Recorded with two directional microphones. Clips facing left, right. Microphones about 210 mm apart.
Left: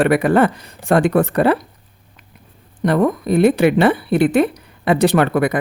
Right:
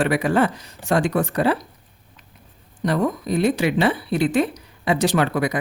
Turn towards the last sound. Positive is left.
turn(degrees=55)  # may be behind; listen again after turning